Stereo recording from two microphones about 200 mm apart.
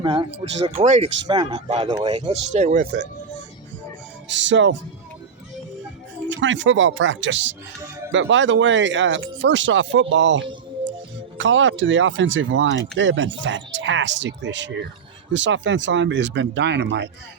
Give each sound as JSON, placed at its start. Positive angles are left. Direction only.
{"t": 0.0, "sound": "speech", "side_deg": -25}
{"t": 1.3, "sound": "speech", "side_deg": -25}
{"t": 2.5, "sound": "speech", "side_deg": -35}
{"t": 4.3, "sound": "speech", "side_deg": -65}
{"t": 6.2, "sound": "speech", "side_deg": -70}